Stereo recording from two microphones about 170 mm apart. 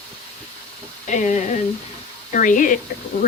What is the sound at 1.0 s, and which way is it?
Speech, 45° left (ahead or behind).